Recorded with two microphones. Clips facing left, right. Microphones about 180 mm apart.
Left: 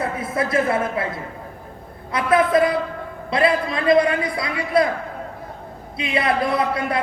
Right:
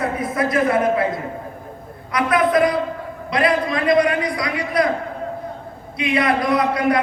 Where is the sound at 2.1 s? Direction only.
25° left (ahead or behind).